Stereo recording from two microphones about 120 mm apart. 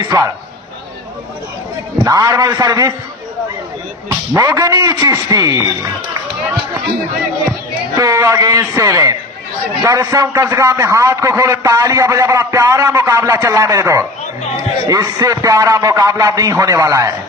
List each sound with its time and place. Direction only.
0.0 s speech: 30° right (ahead or behind)
2.0 s a man's voice: 30° right (ahead or behind)
4.4 s a man's voice: 25° right (ahead or behind)
7.9 s a man's voice: 25° right (ahead or behind)